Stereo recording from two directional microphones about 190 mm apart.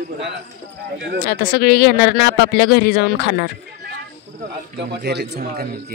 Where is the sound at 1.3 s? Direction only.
60° left (ahead or behind).